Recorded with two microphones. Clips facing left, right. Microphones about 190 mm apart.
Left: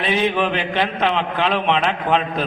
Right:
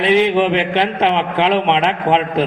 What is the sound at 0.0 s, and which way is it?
A man's voice, 25° right (ahead or behind).